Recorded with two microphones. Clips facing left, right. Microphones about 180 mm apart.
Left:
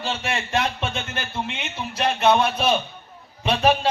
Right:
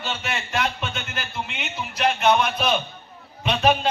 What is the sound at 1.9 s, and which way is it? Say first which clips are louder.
Speech: left 1 dB; 30° left (ahead or behind).